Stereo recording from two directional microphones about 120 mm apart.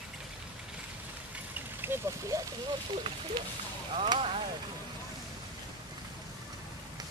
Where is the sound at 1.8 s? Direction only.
20° right (ahead or behind).